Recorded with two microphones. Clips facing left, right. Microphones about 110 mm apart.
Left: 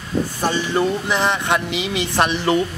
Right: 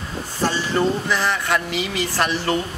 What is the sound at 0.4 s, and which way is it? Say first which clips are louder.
Speech: right 1 dB; 15° left (ahead or behind).